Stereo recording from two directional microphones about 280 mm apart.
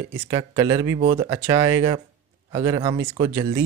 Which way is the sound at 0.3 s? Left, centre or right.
Centre.